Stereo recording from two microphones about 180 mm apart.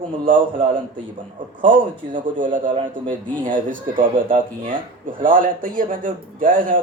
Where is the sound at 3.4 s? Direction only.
50° right (ahead or behind).